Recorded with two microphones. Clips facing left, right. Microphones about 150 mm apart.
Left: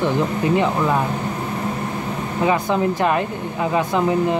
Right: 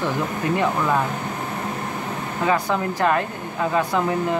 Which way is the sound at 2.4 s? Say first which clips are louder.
Left 3 dB; 20° left (ahead or behind).